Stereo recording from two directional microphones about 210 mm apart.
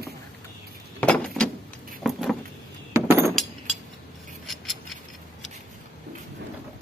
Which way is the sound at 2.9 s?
10° right (ahead or behind).